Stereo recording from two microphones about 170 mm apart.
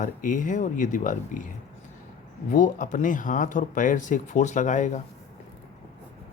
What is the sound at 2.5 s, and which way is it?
Speech, 50° left (ahead or behind).